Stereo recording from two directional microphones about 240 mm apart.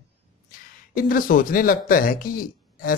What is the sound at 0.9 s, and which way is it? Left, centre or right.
Speech, left.